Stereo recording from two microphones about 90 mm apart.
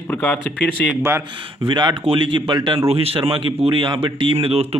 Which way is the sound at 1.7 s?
55° right (ahead or behind).